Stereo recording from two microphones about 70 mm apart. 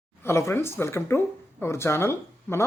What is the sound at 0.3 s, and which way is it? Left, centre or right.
Speech, left.